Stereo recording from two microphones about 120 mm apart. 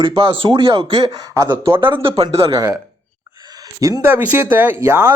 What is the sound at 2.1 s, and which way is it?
Speech, 30° right (ahead or behind).